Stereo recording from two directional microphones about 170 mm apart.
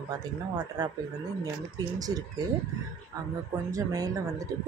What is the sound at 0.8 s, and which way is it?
Speech, 20° right (ahead or behind).